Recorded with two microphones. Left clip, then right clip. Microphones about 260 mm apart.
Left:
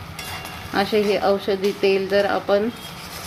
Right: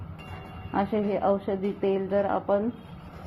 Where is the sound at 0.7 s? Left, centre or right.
Left.